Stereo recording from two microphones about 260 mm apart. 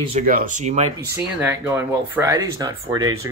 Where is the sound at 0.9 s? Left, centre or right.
Centre.